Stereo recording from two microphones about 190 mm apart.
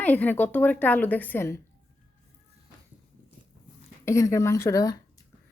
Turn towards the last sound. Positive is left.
turn(degrees=20)  # may be behind; listen again after turning